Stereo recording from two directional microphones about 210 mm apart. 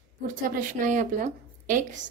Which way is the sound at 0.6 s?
40° right (ahead or behind).